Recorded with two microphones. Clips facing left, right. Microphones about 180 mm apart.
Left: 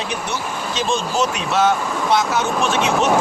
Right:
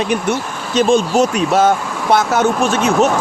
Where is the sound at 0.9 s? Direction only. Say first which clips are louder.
Right 6 dB; 45° right (ahead or behind).